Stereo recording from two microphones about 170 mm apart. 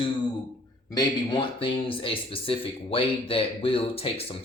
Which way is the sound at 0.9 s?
30° left (ahead or behind).